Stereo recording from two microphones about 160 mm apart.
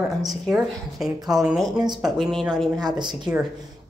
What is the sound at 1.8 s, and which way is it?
Speech, 25° right (ahead or behind).